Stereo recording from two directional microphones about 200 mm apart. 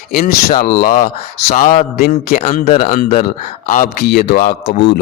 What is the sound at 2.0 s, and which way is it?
Speech, 50° left (ahead or behind).